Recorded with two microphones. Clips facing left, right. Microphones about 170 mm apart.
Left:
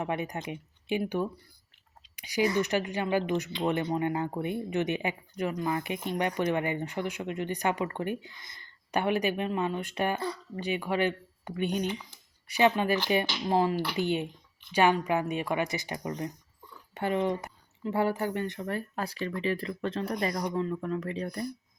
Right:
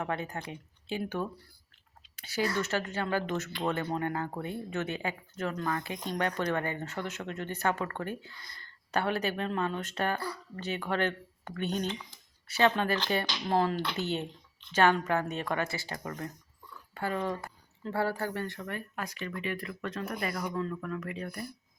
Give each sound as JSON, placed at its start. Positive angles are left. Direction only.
{"t": 0.0, "sound": "speech", "side_deg": 15}
{"t": 18.7, "sound": "speech", "side_deg": 30}